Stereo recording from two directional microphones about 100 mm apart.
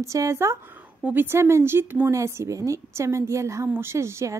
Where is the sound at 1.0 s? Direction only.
20° right (ahead or behind).